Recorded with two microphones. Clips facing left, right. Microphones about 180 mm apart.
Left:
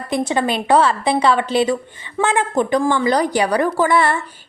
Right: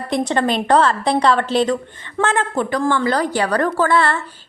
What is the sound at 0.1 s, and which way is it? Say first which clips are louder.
A woman's voice: even; 5° left (ahead or behind).